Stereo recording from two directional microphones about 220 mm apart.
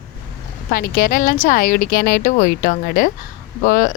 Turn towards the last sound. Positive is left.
turn(degrees=40)  # may be behind; listen again after turning